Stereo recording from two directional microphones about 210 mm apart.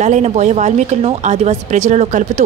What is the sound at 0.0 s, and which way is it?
Speech, 35° right (ahead or behind).